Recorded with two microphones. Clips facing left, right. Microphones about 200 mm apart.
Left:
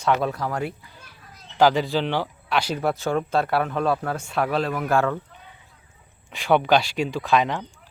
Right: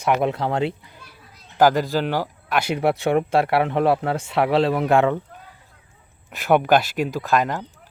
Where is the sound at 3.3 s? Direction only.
70° right (ahead or behind).